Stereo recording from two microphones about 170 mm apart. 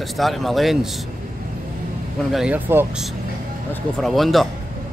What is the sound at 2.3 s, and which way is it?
Speech, 5° right (ahead or behind).